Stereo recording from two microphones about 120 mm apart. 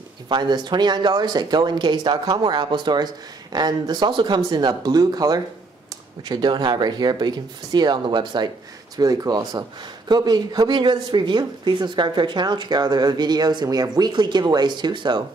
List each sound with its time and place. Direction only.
0.3 s speech: 40° right (ahead or behind)